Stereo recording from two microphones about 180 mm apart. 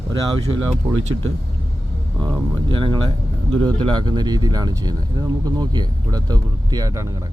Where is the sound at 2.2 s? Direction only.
25° right (ahead or behind).